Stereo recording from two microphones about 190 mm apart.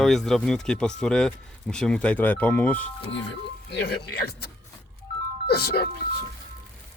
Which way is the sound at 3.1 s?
65° left (ahead or behind).